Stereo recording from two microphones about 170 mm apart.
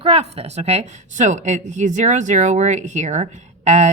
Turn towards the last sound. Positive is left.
turn(degrees=-45)  # may be behind; listen again after turning